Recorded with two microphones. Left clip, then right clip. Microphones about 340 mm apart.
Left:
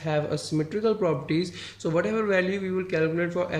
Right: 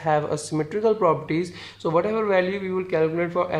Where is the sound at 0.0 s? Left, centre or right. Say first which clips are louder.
Right 5 dB; centre.